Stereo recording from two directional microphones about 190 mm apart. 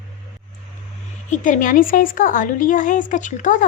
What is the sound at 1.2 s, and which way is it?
A woman's voice, 40° left (ahead or behind).